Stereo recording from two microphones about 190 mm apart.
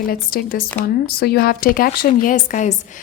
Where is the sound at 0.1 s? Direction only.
50° left (ahead or behind).